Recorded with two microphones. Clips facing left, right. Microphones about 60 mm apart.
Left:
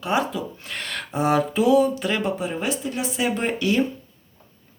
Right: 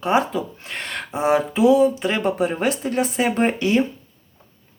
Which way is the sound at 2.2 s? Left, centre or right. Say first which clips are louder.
Right 5 dB; right.